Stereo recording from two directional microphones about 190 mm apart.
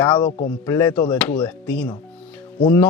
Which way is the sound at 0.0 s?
25° left (ahead or behind).